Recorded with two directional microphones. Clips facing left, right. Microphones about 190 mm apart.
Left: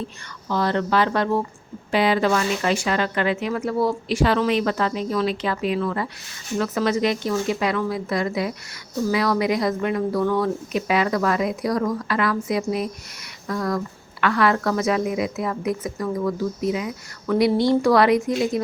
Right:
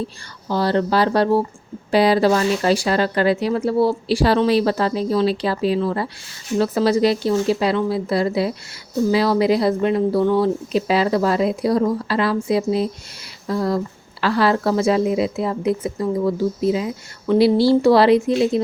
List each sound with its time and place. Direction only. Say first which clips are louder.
0.0 s a woman's voice: right 4 dB; 35° right (ahead or behind)